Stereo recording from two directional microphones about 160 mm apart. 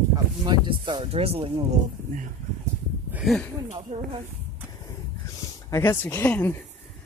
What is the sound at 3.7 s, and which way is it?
Speech, 35° right (ahead or behind).